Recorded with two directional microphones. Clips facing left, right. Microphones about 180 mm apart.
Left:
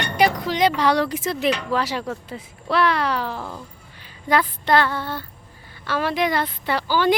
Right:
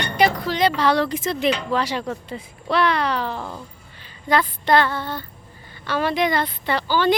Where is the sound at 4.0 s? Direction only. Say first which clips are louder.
Even; 10° left (ahead or behind).